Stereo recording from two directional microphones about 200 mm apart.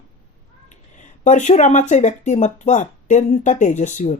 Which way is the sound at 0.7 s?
35° left (ahead or behind).